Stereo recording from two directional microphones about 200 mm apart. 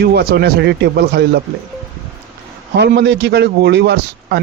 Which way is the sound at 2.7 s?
55° right (ahead or behind).